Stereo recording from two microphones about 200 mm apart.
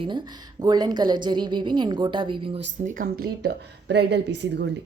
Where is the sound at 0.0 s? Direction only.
25° right (ahead or behind).